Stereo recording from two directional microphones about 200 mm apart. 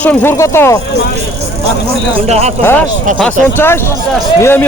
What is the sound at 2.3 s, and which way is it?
Speech, 35° right (ahead or behind).